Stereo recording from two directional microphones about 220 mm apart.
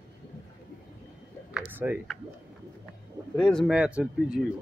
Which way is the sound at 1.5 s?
5° right (ahead or behind).